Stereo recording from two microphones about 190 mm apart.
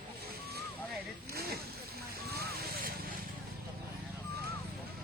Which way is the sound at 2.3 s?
55° right (ahead or behind).